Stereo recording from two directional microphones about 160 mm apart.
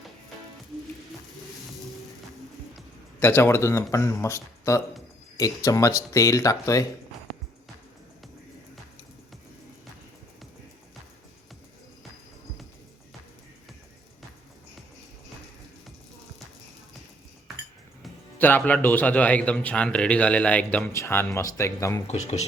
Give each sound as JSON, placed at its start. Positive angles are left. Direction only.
{"t": 3.2, "sound": "a man's voice", "side_deg": 15}
{"t": 18.3, "sound": "a man's voice", "side_deg": 10}
{"t": 22.0, "sound": "speech", "side_deg": 45}